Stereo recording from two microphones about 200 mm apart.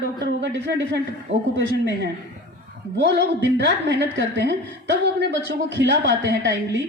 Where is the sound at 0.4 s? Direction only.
60° right (ahead or behind).